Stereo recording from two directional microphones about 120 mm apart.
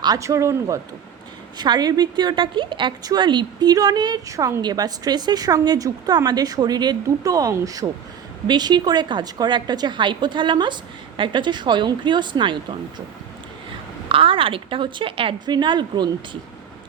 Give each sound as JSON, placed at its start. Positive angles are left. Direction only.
{"t": 0.0, "sound": "speech", "side_deg": -30}
{"t": 1.5, "sound": "a woman's voice", "side_deg": -35}
{"t": 14.1, "sound": "speech", "side_deg": -50}